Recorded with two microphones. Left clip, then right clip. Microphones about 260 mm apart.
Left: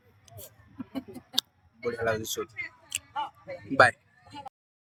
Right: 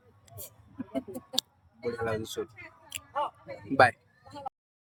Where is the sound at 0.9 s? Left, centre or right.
Right.